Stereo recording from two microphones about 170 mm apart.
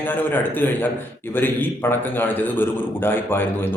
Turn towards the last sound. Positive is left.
turn(degrees=15)  # may be behind; listen again after turning